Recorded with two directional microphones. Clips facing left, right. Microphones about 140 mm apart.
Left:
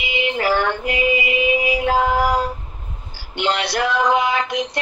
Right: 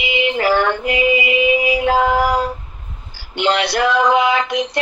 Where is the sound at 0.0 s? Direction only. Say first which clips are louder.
Right 3 dB; 90° right.